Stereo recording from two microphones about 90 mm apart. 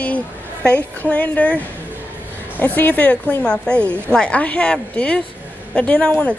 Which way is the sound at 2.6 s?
20° left (ahead or behind).